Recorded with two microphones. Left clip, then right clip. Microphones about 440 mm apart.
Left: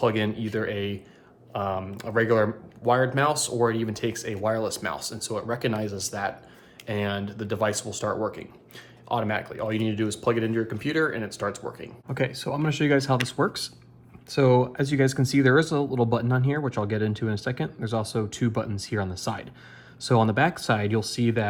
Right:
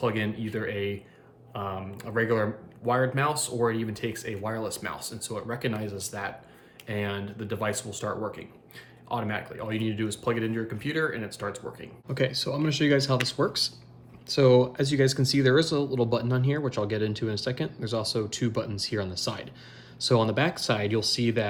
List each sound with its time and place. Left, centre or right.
0.0 s speech: centre